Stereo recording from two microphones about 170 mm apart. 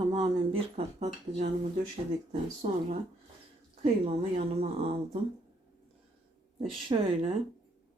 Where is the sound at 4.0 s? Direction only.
35° right (ahead or behind).